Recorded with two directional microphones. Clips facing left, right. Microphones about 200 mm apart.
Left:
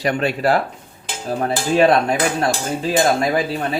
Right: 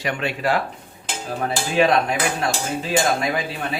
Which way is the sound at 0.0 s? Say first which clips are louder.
Left 5 dB; 40° left (ahead or behind).